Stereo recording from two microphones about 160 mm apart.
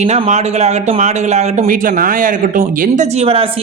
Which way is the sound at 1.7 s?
60° right (ahead or behind).